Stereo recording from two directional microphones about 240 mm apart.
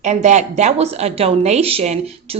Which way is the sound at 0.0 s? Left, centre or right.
Right.